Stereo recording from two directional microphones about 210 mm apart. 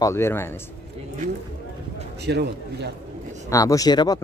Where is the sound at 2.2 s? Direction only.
55° right (ahead or behind).